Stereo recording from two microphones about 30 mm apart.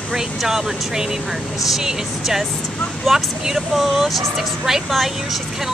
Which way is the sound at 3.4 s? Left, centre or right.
Centre.